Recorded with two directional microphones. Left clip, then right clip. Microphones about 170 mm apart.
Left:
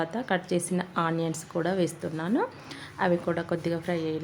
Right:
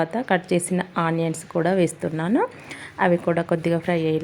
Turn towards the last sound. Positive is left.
turn(degrees=-25)  # may be behind; listen again after turning